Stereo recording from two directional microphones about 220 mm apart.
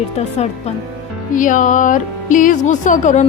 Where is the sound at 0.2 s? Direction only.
30° left (ahead or behind).